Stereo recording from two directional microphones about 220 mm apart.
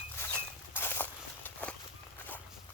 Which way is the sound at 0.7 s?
10° left (ahead or behind).